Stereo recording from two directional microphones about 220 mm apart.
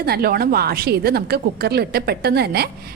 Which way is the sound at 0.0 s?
45° right (ahead or behind).